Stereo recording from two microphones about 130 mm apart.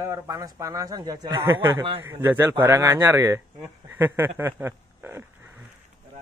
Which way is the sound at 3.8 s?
15° right (ahead or behind).